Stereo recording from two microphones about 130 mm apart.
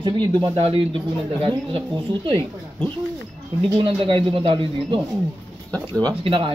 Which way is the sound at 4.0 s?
40° right (ahead or behind).